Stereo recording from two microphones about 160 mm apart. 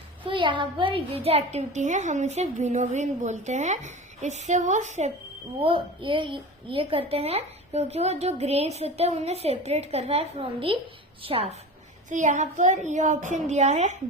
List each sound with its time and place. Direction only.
0.3 s a child's voice: 30° right (ahead or behind); by 5.1 s 45° right (ahead or behind)
5.5 s a woman's voice: 35° right (ahead or behind)
12.0 s a child's voice: 50° right (ahead or behind)